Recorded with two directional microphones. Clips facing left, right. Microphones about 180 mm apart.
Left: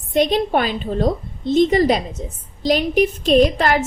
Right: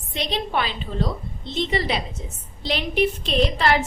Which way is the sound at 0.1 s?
50° left (ahead or behind).